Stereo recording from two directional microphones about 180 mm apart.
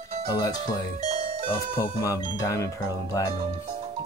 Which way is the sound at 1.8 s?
20° left (ahead or behind).